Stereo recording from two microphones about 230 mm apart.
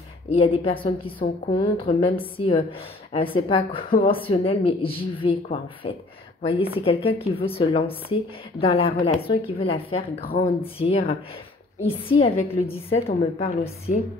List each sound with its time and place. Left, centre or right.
0.3 s speech: left
10.2 s speech: left
10.6 s speech: left